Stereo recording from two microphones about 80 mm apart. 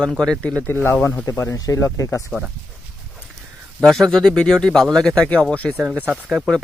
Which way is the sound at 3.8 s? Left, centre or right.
Centre.